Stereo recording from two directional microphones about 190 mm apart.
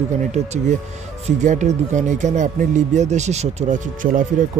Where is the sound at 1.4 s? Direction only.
40° right (ahead or behind).